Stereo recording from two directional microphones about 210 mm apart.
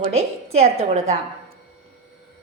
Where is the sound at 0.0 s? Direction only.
30° right (ahead or behind).